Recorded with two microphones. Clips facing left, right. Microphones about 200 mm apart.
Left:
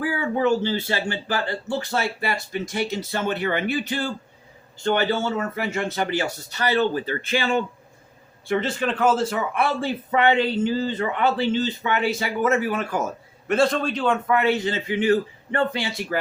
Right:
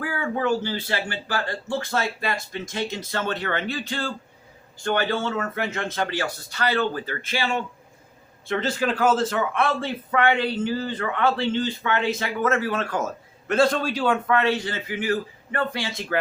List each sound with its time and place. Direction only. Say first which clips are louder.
0.0 s speech: left 3 dB; 20° left (ahead or behind)
5.2 s speech: left 1 dB; 10° left (ahead or behind)
8.4 s speech: left 1 dB; 10° left (ahead or behind)
8.9 s a man's voice: left 1 dB; 5° right (ahead or behind)
9.8 s speech: left 2 dB; 20° left (ahead or behind)
13.5 s a man's voice: even; centre (ahead or behind)
14.3 s speech: left 2 dB; 15° left (ahead or behind)